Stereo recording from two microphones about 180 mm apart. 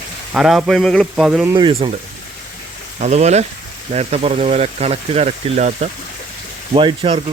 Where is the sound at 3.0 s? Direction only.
40° right (ahead or behind).